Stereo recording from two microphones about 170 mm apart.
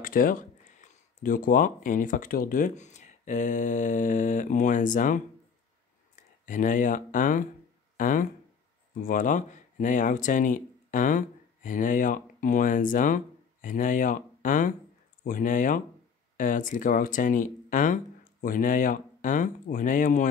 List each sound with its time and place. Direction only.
0.0 s speech: 55° left (ahead or behind)
6.4 s speech: 50° left (ahead or behind)